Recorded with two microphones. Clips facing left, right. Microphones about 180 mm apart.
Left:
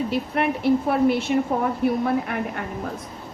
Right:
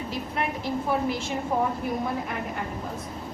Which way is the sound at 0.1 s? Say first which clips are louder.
Left 7 dB; 65° left (ahead or behind).